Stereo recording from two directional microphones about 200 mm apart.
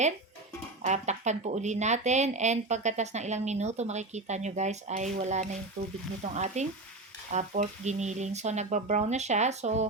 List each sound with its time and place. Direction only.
0.8 s speech: 35° right (ahead or behind)